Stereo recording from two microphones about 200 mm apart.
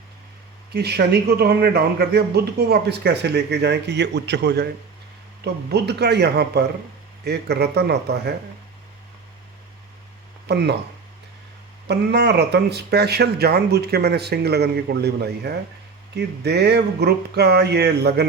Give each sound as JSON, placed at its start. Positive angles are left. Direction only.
{"t": 0.7, "sound": "speech", "side_deg": -55}
{"t": 10.5, "sound": "speech", "side_deg": -55}
{"t": 11.9, "sound": "speech", "side_deg": -55}